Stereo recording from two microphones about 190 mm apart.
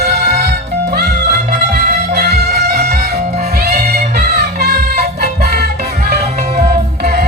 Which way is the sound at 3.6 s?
55° right (ahead or behind).